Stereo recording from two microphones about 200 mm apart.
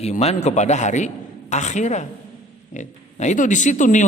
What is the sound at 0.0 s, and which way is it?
A man's voice, 30° left (ahead or behind).